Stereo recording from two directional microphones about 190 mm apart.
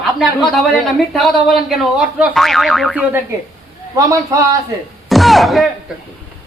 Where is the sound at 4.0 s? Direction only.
20° right (ahead or behind).